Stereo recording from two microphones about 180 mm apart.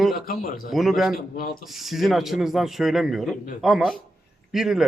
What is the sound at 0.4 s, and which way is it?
Speech, 50° left (ahead or behind).